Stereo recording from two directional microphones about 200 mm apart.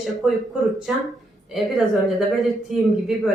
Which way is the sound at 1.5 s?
Centre (ahead or behind).